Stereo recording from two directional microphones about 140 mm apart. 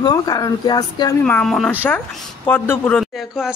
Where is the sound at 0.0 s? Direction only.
25° left (ahead or behind).